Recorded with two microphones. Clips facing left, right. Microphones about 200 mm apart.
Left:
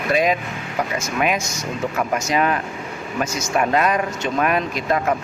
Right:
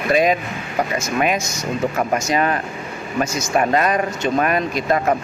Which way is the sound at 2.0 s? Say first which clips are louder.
Left 1 dB; 40° right (ahead or behind).